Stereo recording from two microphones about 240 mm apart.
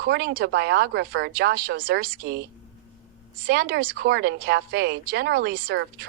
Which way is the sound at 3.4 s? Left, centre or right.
Right.